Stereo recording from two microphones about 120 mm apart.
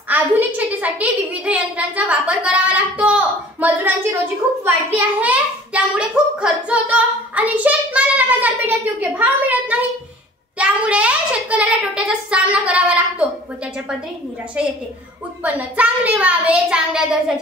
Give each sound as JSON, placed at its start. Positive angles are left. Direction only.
{"t": 0.1, "sound": "a woman's voice", "side_deg": -15}
{"t": 15.4, "sound": "a child's voice", "side_deg": -10}